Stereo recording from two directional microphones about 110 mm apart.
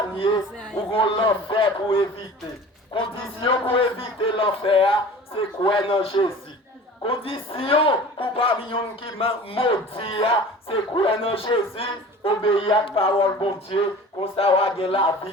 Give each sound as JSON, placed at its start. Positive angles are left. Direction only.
{"t": 0.8, "sound": "a man's voice", "side_deg": 55}